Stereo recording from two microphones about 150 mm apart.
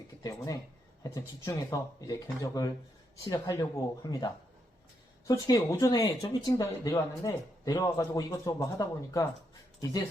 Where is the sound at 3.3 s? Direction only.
25° left (ahead or behind).